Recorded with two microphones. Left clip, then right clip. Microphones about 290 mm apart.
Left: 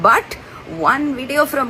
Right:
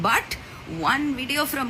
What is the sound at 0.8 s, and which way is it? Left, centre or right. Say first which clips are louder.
Speech: left 7 dB; centre.